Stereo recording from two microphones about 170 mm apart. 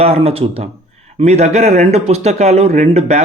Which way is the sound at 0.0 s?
35° right (ahead or behind).